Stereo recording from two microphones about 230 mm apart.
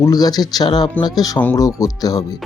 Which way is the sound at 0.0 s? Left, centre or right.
Centre.